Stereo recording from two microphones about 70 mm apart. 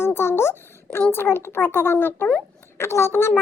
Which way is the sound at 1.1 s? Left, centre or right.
Left.